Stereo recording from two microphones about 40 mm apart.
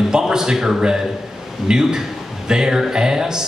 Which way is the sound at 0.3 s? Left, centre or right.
Centre.